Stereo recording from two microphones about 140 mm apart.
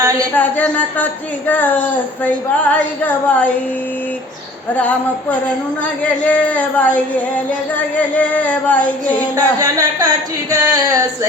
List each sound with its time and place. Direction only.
0.3 s speech: 10° left (ahead or behind)
5.8 s speech: 10° left (ahead or behind)
9.3 s speech: 25° right (ahead or behind)